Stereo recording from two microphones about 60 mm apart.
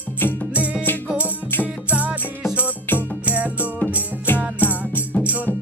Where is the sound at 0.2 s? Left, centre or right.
Left.